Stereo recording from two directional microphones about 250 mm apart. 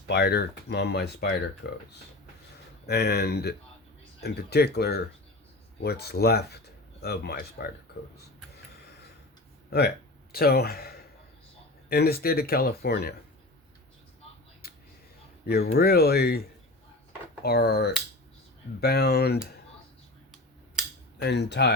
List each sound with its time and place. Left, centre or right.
0.1 s speech: left
9.6 s speech: left
14.6 s a sound: left
15.4 s speech: left
21.2 s speech: left